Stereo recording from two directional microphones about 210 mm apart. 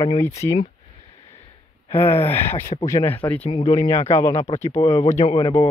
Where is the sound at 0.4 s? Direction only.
15° left (ahead or behind).